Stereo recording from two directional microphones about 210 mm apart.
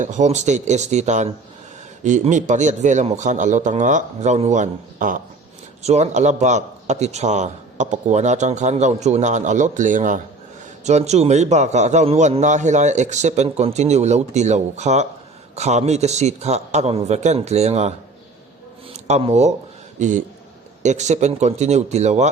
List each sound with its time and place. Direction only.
0.0 s speech: 35° right (ahead or behind)
19.0 s speech: 30° right (ahead or behind)